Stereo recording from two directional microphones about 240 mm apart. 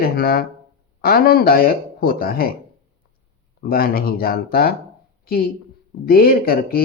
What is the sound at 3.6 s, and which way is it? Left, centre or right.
Speech, left.